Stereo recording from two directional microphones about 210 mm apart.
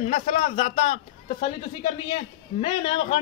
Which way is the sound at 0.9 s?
30° left (ahead or behind).